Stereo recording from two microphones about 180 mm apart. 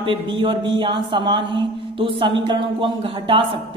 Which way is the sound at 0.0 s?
30° right (ahead or behind).